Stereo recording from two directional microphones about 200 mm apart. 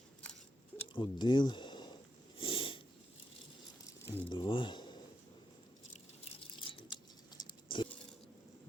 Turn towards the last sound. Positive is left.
turn(degrees=25)  # may be behind; listen again after turning